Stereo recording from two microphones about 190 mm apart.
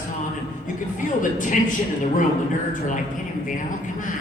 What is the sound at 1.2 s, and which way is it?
Speech, 45° left (ahead or behind).